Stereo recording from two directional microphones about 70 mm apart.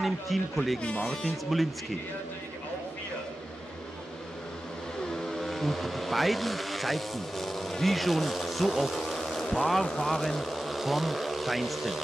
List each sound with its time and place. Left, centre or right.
0.0 s speech: centre
0.7 s speech: centre
1.5 s speech: centre
5.1 s speech: centre